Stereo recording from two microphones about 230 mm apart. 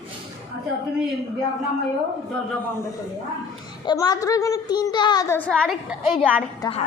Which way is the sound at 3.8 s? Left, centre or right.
Centre.